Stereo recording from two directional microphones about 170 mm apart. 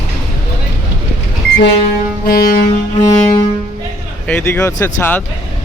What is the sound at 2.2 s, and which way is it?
Music, 60° left (ahead or behind).